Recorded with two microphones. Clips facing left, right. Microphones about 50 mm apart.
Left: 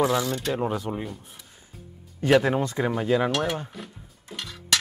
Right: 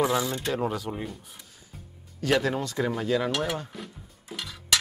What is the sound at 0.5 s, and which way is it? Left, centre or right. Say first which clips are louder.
Speech: left 2 dB; centre.